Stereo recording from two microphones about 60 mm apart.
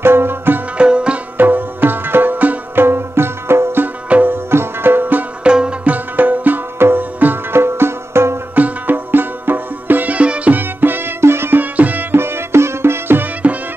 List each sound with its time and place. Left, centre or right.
0.0 s music: right
0.7 s music: centre
1.4 s music: right
5.4 s music: centre
5.9 s music: right
8.5 s music: right
10.6 s music: right
11.6 s music: right